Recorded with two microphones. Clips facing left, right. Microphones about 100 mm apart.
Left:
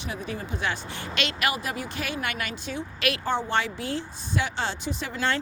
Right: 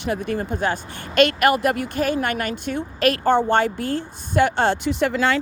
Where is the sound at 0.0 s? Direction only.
60° right (ahead or behind); by 5.4 s 75° right (ahead or behind).